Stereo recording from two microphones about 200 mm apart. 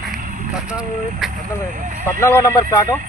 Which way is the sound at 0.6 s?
Centre (ahead or behind).